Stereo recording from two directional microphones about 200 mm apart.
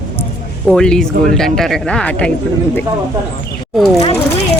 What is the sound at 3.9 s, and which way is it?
Speech, 30° left (ahead or behind).